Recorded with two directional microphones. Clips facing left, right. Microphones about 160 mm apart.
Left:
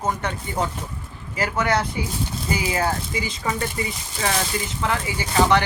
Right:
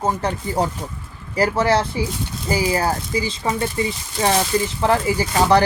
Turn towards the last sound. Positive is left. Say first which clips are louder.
# right 3 dB
turn(degrees=-35)  # may be behind; listen again after turning